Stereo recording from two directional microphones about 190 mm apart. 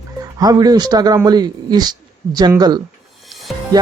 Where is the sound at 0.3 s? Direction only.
20° right (ahead or behind).